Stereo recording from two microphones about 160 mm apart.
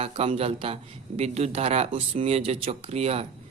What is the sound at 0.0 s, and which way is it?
Speech, 40° right (ahead or behind).